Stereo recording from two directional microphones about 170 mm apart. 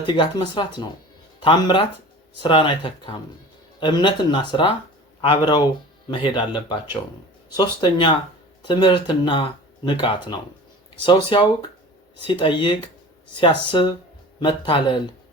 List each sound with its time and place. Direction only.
0.0 s speech: 25° left (ahead or behind)